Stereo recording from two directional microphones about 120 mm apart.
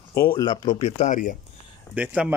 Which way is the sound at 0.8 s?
80° left.